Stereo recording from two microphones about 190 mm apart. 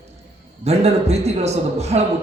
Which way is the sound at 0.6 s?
35° right (ahead or behind).